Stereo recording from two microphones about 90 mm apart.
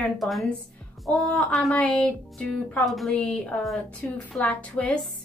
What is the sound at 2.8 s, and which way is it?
Speech, centre (ahead or behind).